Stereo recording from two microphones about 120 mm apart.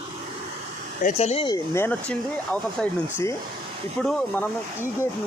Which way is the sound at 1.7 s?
20° left (ahead or behind).